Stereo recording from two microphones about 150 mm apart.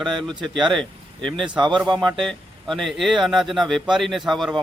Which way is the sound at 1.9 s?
Centre (ahead or behind).